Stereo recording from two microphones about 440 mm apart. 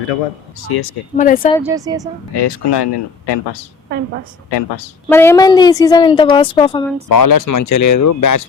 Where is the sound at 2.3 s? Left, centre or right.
Left.